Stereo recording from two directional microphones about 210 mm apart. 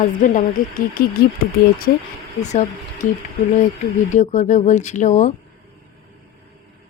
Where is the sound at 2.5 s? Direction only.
35° left (ahead or behind).